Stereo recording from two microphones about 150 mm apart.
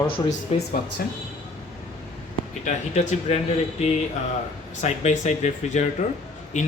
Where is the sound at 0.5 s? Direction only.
45° left (ahead or behind).